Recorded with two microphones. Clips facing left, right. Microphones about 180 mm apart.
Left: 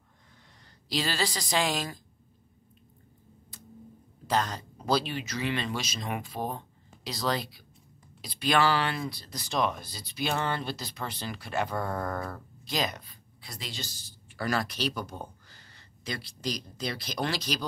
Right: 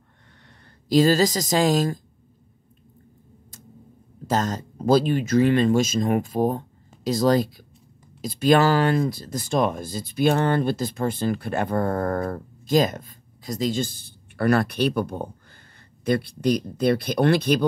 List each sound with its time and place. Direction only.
0.8 s speech: 45° right (ahead or behind)
4.3 s speech: 45° right (ahead or behind)